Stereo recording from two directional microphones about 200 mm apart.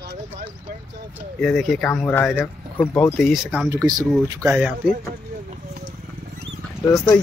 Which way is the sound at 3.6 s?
20° right (ahead or behind).